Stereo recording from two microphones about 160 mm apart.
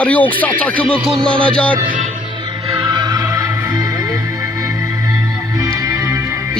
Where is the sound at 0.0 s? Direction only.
10° left (ahead or behind).